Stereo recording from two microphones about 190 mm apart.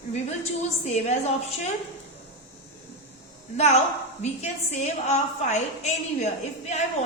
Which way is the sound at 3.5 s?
35° left (ahead or behind).